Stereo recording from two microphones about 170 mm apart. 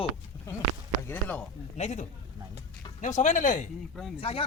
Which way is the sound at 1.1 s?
10° left (ahead or behind).